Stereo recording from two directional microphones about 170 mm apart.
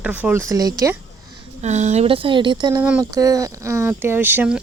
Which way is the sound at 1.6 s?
40° right (ahead or behind).